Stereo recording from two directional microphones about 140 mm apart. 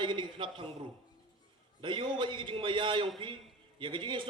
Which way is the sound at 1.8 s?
35° right (ahead or behind).